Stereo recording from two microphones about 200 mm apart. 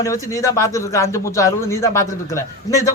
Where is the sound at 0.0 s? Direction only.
15° left (ahead or behind).